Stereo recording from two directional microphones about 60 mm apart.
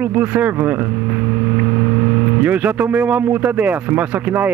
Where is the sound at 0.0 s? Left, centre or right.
Right.